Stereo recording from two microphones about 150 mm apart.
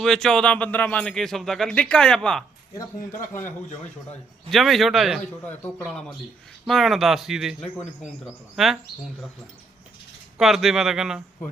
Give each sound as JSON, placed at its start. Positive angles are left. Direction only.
{"t": 0.0, "sound": "speech", "side_deg": 0}
{"t": 4.5, "sound": "speech", "side_deg": 0}
{"t": 10.3, "sound": "speech", "side_deg": 0}